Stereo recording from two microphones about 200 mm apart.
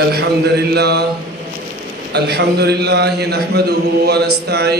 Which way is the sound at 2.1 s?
55° right (ahead or behind).